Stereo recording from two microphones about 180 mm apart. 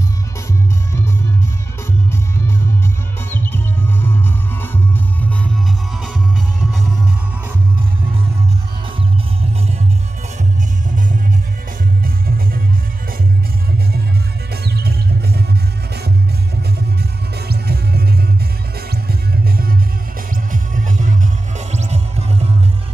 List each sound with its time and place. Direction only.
3.3 s music: 10° left (ahead or behind)
12.0 s music: 55° right (ahead or behind)
14.5 s music: 65° right (ahead or behind)
17.5 s music: 60° right (ahead or behind)
20.5 s music: 45° right (ahead or behind)